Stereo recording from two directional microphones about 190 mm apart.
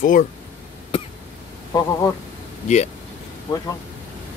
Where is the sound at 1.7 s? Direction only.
15° left (ahead or behind).